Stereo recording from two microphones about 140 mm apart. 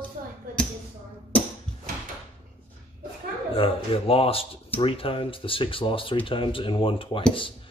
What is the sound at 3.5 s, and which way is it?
Speech, 40° left (ahead or behind).